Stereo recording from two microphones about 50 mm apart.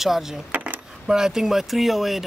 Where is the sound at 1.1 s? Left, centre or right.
Centre.